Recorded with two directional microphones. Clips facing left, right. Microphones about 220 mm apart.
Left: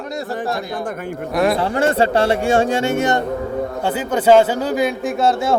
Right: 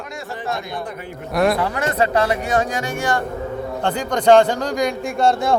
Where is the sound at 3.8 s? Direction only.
5° left (ahead or behind).